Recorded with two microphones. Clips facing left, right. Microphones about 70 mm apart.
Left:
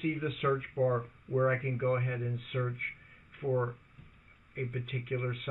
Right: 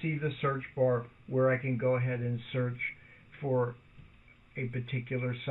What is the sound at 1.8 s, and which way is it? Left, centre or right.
Speech, right.